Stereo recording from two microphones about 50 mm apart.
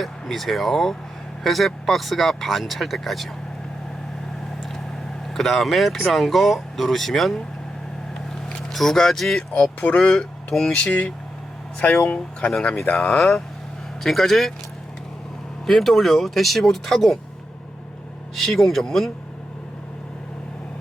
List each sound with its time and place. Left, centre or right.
0.0 s speech: centre
5.3 s speech: centre
8.4 s speech: centre
15.6 s speech: centre
18.3 s speech: centre